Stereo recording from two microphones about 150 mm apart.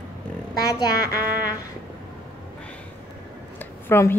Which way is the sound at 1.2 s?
15° right (ahead or behind).